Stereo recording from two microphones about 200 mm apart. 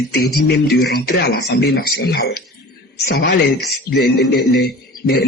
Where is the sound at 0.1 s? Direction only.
55° left (ahead or behind).